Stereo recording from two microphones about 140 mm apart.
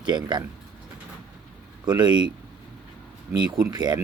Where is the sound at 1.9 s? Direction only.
30° right (ahead or behind).